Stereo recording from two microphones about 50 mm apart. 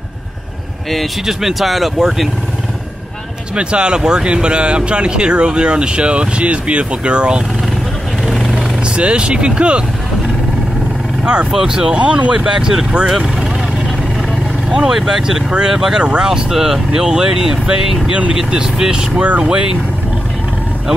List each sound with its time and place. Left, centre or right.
1.2 s speech: centre
3.5 s speech: centre
8.3 s a sound: centre
8.8 s speech: right
11.5 s speech: centre
14.7 s speech: centre